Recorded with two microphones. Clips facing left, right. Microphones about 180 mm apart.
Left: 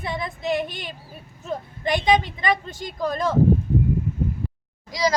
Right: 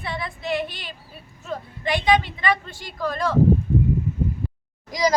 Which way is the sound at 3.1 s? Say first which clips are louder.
Even; 20° left (ahead or behind).